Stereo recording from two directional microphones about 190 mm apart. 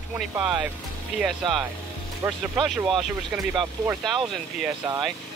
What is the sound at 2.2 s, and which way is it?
Speech, 15° right (ahead or behind).